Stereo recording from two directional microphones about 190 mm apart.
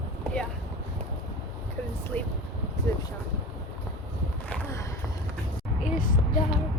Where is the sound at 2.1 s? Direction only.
10° left (ahead or behind).